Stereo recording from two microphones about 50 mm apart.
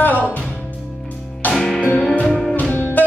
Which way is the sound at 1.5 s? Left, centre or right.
Centre.